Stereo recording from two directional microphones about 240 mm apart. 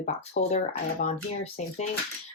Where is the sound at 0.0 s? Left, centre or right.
Left.